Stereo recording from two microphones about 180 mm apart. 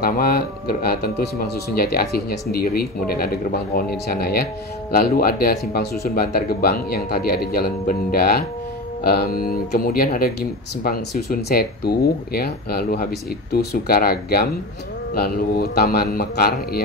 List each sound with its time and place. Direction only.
0.0 s speech: 55° left (ahead or behind)
11.4 s speech: 60° left (ahead or behind)